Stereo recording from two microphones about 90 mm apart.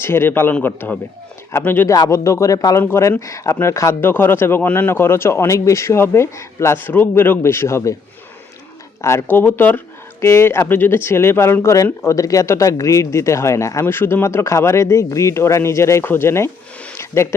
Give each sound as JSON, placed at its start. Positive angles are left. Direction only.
{"t": 0.0, "sound": "speech", "side_deg": 25}
{"t": 1.9, "sound": "speech", "side_deg": 35}
{"t": 2.8, "sound": "speech", "side_deg": 30}
{"t": 9.0, "sound": "speech", "side_deg": 30}